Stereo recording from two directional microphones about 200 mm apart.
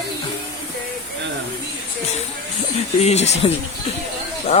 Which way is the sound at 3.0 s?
35° left (ahead or behind).